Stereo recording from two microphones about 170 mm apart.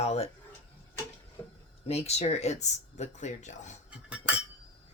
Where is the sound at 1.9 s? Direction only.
40° left (ahead or behind).